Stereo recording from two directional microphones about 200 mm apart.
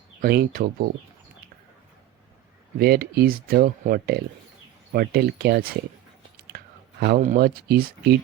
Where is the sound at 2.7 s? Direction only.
50° right (ahead or behind).